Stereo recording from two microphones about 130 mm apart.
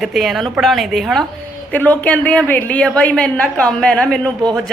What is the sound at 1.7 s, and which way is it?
A woman's voice, 10° left (ahead or behind).